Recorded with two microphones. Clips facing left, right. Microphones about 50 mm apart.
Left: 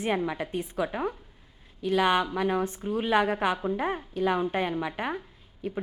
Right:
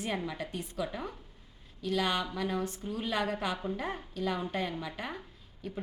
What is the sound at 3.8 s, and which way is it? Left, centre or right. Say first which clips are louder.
A woman's voice: left 7 dB; left.